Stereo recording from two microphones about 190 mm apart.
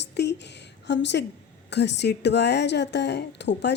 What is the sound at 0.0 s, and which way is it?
A woman's voice, 65° left (ahead or behind).